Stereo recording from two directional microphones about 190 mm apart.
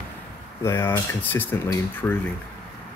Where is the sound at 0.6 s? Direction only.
15° left (ahead or behind).